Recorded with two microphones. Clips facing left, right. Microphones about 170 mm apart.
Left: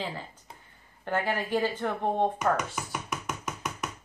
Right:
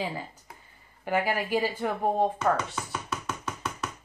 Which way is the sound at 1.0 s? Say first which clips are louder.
Right 2 dB; 10° right (ahead or behind).